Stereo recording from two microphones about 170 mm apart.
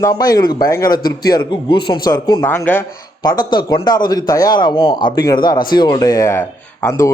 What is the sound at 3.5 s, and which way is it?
A man's voice, 25° left (ahead or behind).